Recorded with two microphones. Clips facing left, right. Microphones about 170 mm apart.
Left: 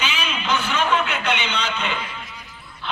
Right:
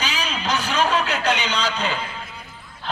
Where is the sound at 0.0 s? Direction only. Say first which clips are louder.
Even; 35° right (ahead or behind).